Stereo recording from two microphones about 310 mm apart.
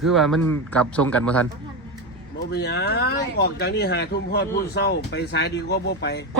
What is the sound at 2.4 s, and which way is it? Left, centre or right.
Speech, left.